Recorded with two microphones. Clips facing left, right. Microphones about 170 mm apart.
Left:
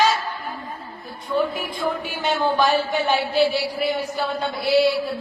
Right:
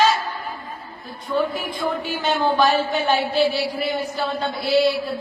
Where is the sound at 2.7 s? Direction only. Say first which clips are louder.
Even; 15° left (ahead or behind).